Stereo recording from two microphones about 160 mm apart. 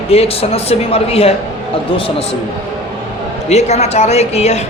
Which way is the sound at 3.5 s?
45° left (ahead or behind).